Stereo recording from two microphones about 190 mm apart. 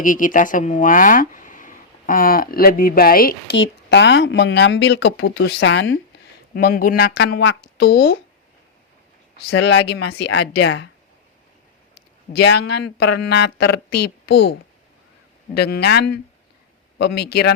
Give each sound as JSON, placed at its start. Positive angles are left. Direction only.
{"t": 0.0, "sound": "speech", "side_deg": 45}
{"t": 6.5, "sound": "speech", "side_deg": 55}
{"t": 9.5, "sound": "speech", "side_deg": 70}
{"t": 12.3, "sound": "speech", "side_deg": 65}
{"t": 15.5, "sound": "speech", "side_deg": 60}